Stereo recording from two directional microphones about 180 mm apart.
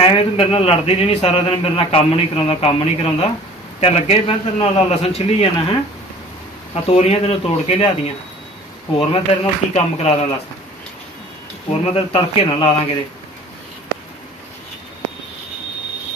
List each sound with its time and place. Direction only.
0.0 s a man's voice: 30° left (ahead or behind)
9.1 s a man's voice: 30° left (ahead or behind)
11.8 s a man's voice: 30° left (ahead or behind)